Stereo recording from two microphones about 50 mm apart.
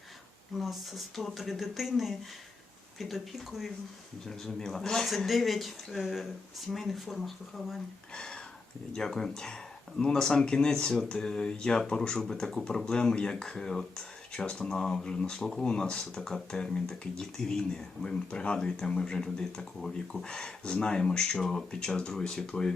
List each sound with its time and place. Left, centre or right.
0.6 s speech: centre
4.3 s speech: centre
8.1 s a sound: centre
8.9 s speech: centre